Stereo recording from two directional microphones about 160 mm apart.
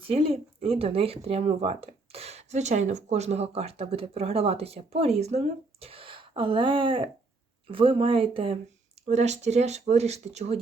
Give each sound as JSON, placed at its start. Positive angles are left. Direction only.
{"t": 0.1, "sound": "speech", "side_deg": -35}
{"t": 9.0, "sound": "speech", "side_deg": -45}